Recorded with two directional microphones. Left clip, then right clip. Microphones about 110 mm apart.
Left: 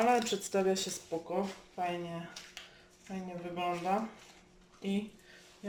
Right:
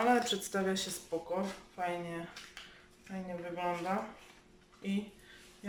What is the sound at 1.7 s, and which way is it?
Speech, 10° left (ahead or behind).